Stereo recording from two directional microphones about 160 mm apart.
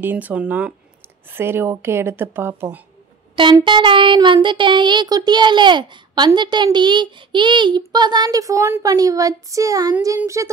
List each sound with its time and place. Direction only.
0.0 s a woman's voice: 10° right (ahead or behind)
3.5 s child singing: 30° right (ahead or behind)